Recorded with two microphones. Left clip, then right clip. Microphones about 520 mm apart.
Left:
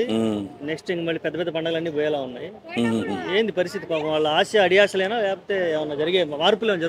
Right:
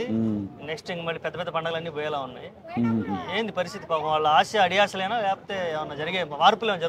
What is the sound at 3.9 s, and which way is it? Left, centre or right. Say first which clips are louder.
Speech: right 2 dB; right.